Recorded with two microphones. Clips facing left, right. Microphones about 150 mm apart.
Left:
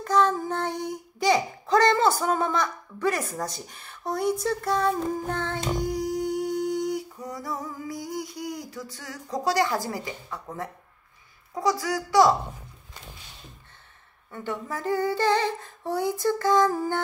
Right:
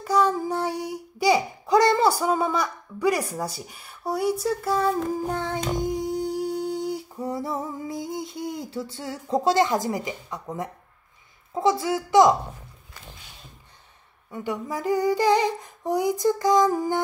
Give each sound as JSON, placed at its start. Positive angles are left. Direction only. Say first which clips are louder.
{"t": 0.0, "sound": "child singing", "louder": "right 1 dB", "side_deg": -10}
{"t": 11.5, "sound": "a child's voice", "louder": "right 3 dB", "side_deg": -25}
{"t": 14.3, "sound": "humming", "louder": "right 3 dB", "side_deg": -15}